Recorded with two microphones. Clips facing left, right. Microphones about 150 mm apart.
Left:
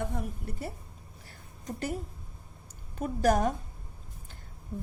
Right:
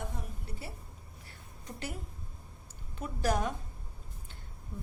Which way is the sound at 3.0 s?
45° left (ahead or behind).